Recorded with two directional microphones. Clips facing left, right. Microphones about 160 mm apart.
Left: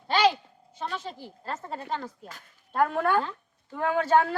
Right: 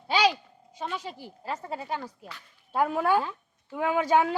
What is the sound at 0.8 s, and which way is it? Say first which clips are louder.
Speech: even; 10° right (ahead or behind).